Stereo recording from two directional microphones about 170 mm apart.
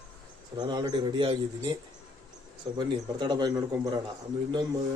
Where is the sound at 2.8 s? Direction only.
25° right (ahead or behind).